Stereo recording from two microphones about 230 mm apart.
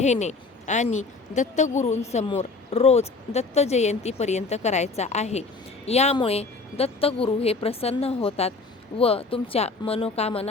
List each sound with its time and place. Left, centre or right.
0.0 s speech: left